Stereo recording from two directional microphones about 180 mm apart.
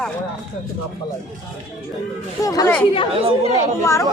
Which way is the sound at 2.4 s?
20° left (ahead or behind).